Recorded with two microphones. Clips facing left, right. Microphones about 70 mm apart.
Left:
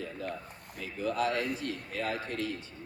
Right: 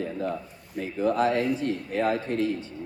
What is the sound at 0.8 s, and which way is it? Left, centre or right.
A man's voice, right.